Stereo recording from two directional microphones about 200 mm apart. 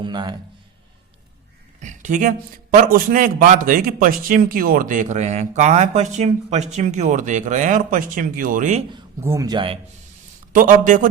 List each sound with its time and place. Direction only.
0.0 s a man's voice: 20° right (ahead or behind)
1.8 s a man's voice: 40° right (ahead or behind)
9.2 s speech: 15° right (ahead or behind)
10.5 s a man's voice: 40° right (ahead or behind)